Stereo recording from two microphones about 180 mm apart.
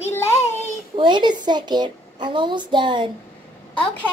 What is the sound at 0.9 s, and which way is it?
A woman's voice, 25° right (ahead or behind).